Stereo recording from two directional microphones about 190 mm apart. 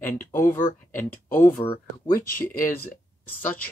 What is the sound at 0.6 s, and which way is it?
Speech, 40° left (ahead or behind).